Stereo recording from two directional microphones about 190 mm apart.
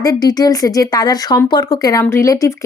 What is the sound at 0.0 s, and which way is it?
Speech, 20° left (ahead or behind).